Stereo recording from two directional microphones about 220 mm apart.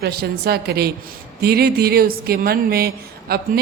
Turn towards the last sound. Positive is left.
turn(degrees=-45)  # may be behind; listen again after turning